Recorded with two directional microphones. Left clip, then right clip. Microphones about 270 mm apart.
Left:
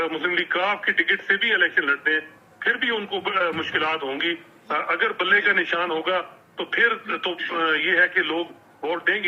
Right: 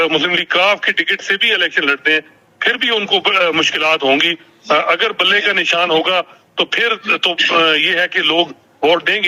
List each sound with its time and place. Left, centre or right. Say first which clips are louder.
0.0 s a man's voice: right 9 dB; right